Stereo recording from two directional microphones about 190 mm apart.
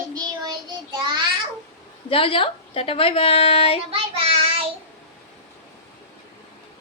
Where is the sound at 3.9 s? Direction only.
30° right (ahead or behind).